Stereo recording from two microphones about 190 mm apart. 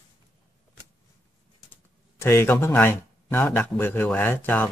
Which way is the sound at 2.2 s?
15° left (ahead or behind).